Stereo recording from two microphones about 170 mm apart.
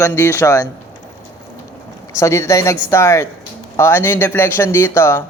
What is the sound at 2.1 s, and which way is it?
Speech, 15° left (ahead or behind).